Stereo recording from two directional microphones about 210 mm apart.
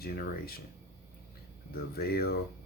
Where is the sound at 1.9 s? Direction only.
45° left (ahead or behind).